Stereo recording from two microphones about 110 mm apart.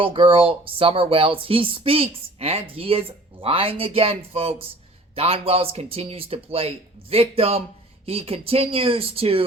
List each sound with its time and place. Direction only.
0.0 s speech: 55° right (ahead or behind)